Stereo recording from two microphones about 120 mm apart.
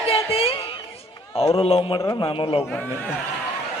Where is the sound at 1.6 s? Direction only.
50° left (ahead or behind).